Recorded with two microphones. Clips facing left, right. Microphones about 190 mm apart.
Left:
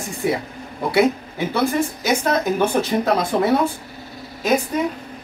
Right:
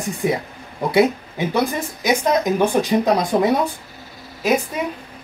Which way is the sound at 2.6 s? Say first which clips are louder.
Right 2 dB; 15° right (ahead or behind).